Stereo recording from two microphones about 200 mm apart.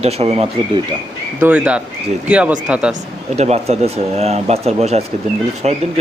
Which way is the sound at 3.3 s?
30° right (ahead or behind).